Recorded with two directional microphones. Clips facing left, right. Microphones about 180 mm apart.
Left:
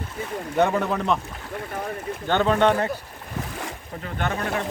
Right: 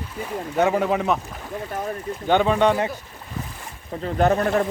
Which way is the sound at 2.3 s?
15° right (ahead or behind).